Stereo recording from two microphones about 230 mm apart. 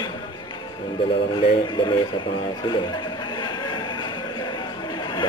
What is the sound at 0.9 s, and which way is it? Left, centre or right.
Radio, centre.